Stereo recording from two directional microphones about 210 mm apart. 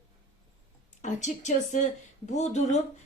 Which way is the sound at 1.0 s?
35° left (ahead or behind).